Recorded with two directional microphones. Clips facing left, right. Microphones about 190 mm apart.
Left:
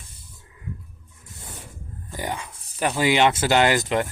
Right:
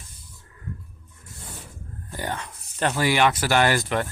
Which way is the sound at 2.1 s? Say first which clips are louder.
Left 1 dB; 15° left (ahead or behind).